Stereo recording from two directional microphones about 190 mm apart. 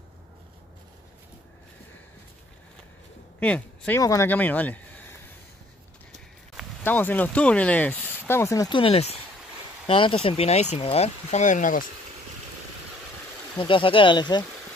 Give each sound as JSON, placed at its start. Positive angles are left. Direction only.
{"t": 3.3, "sound": "speech", "side_deg": 5}
{"t": 6.8, "sound": "speech", "side_deg": 10}
{"t": 13.6, "sound": "speech", "side_deg": 25}